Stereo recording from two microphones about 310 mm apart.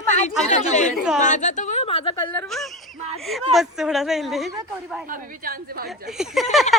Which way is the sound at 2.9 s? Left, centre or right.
Right.